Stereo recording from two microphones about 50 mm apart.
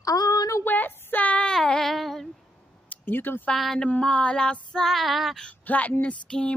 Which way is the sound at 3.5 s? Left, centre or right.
Centre.